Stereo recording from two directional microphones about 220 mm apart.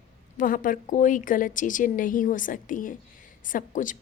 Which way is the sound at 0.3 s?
40° left (ahead or behind).